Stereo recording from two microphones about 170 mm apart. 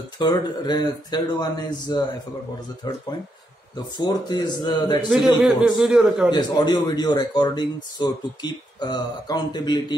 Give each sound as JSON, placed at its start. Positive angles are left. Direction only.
{"t": 0.2, "sound": "speech", "side_deg": 25}
{"t": 5.4, "sound": "a man's voice", "side_deg": -5}
{"t": 6.3, "sound": "speech", "side_deg": 25}